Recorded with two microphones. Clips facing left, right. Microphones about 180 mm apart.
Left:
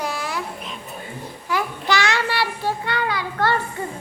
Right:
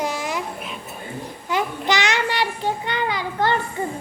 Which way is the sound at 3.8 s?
20° right (ahead or behind).